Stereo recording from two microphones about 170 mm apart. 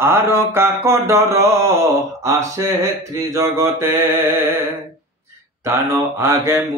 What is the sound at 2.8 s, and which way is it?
Mantra, 20° right (ahead or behind).